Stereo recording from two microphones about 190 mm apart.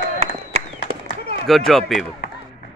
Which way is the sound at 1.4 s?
Centre (ahead or behind).